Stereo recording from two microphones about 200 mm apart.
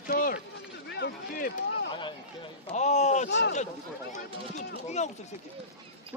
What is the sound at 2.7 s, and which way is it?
Speech, 35° left (ahead or behind).